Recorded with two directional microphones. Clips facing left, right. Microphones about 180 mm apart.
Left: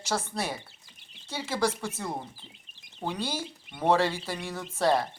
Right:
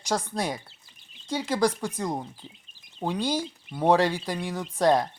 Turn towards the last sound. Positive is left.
turn(degrees=-15)  # may be behind; listen again after turning